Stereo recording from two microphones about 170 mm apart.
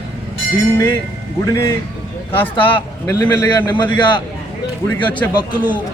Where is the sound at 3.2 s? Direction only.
10° left (ahead or behind).